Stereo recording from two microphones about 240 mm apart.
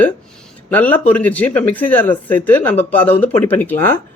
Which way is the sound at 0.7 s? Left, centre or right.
Centre.